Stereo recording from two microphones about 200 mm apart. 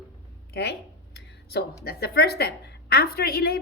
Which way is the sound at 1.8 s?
50° left (ahead or behind).